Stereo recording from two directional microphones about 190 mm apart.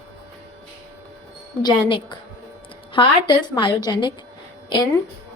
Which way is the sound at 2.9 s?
25° left (ahead or behind).